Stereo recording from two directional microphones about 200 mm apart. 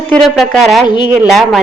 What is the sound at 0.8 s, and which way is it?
Speech, 20° left (ahead or behind).